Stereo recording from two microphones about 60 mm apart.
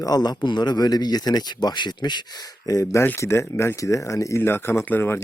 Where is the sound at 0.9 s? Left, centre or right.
Left.